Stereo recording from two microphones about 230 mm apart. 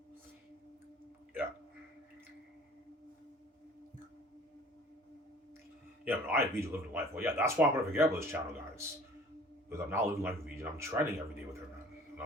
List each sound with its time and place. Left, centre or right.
6.1 s speech: centre